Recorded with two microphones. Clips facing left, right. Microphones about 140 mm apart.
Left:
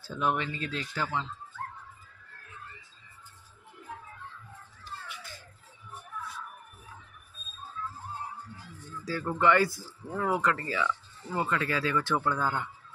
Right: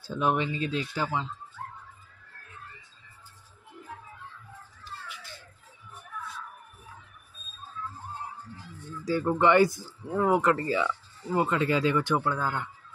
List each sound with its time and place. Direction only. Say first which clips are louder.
0.0 s speech: right 3 dB; 20° right (ahead or behind)
9.0 s speech: right 3 dB; 20° right (ahead or behind)
12.2 s speech: even; centre (ahead or behind)